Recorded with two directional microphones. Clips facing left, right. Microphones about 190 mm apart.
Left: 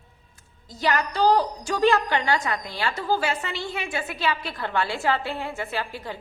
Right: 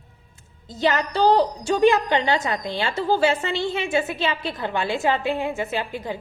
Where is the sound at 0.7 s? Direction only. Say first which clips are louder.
Right 3 dB; 25° right (ahead or behind).